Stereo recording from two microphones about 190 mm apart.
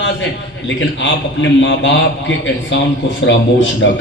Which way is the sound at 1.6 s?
70° left (ahead or behind).